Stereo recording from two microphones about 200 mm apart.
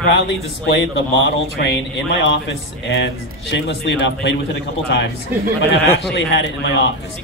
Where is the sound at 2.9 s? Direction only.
60° left (ahead or behind).